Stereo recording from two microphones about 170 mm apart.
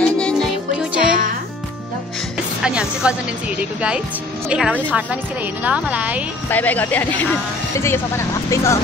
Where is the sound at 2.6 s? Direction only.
5° right (ahead or behind).